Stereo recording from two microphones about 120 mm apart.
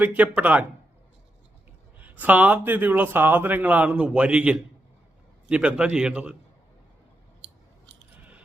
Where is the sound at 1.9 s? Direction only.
15° right (ahead or behind).